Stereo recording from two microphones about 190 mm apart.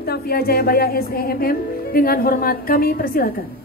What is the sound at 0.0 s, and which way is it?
Music, 55° left (ahead or behind).